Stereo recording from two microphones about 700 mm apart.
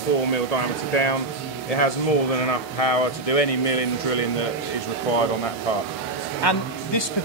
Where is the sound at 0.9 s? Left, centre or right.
Left.